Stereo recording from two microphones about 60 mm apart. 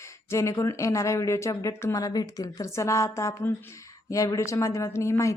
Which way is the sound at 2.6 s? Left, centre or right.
Left.